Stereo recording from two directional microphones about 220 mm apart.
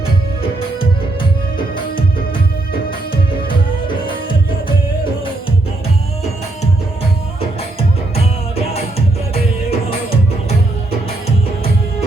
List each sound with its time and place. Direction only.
7.8 s music: 30° left (ahead or behind)